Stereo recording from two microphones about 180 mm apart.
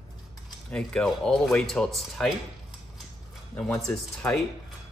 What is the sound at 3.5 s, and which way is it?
Speech, 5° left (ahead or behind).